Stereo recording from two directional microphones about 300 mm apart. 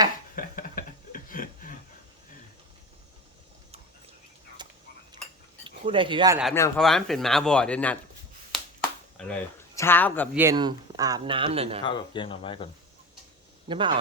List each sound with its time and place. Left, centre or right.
0.3 s a sound: left
4.6 s a sound: centre
5.6 s speech: centre
6.4 s speech: centre
9.1 s speech: centre
10.3 s speech: centre
11.9 s speech: centre
13.7 s a man's voice: centre